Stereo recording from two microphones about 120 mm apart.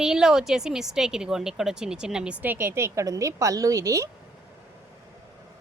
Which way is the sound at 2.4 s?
15° right (ahead or behind).